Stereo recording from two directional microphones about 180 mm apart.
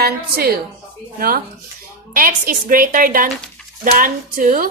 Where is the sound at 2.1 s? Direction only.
50° right (ahead or behind).